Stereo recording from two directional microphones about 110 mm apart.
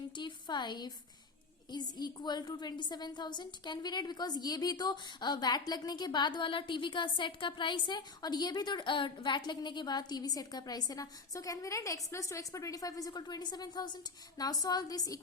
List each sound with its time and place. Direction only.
0.2 s a woman's voice: 45° left (ahead or behind)